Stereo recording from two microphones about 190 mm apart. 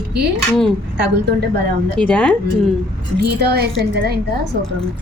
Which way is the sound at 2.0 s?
5° left (ahead or behind).